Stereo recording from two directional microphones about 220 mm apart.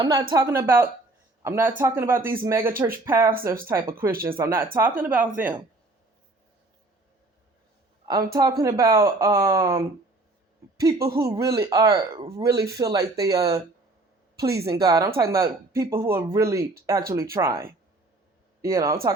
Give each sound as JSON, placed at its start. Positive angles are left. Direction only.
{"t": 0.0, "sound": "speech", "side_deg": -20}
{"t": 8.0, "sound": "speech", "side_deg": -15}